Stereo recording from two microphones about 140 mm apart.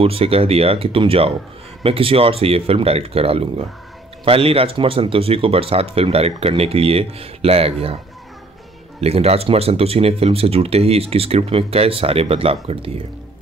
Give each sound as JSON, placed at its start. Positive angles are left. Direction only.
{"t": 0.0, "sound": "speech", "side_deg": -45}
{"t": 9.0, "sound": "speech", "side_deg": -45}